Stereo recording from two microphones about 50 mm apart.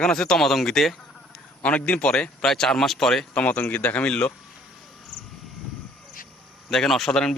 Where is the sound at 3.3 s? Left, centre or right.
Left.